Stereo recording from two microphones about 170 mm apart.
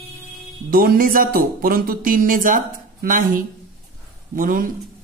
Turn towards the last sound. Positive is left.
turn(degrees=-55)  # may be behind; listen again after turning